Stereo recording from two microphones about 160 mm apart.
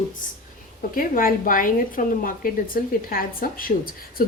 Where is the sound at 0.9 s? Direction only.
60° left (ahead or behind).